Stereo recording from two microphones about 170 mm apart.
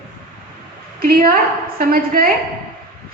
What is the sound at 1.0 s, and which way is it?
A woman's voice, 60° right (ahead or behind).